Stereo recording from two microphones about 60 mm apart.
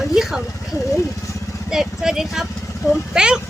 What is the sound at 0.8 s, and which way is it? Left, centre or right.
Speech, left.